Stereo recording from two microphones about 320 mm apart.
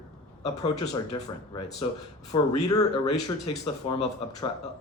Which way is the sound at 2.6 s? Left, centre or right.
Centre.